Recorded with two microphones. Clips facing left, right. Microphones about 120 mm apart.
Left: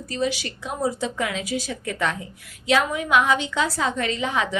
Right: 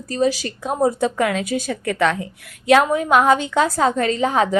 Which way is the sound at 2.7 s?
45° right (ahead or behind).